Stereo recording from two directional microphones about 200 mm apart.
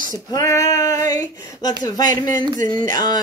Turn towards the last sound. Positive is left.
turn(degrees=20)  # may be behind; listen again after turning